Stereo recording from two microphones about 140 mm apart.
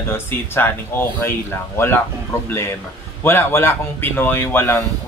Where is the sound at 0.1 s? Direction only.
15° left (ahead or behind).